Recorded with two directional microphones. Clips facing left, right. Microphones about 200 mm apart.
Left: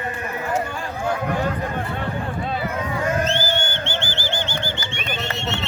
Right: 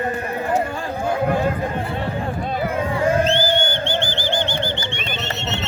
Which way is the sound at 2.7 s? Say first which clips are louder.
Right 6 dB; 30° right (ahead or behind).